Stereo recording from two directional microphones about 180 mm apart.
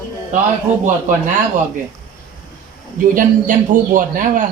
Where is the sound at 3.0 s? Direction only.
50° right (ahead or behind).